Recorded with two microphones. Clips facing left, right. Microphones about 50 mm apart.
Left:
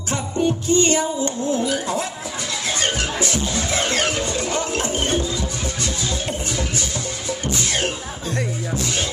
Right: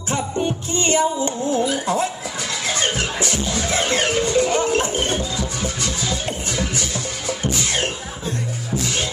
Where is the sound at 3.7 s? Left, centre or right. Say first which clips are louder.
Right 2 dB; right.